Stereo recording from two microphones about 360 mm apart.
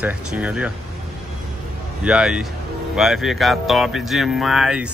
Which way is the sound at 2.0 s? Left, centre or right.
Centre.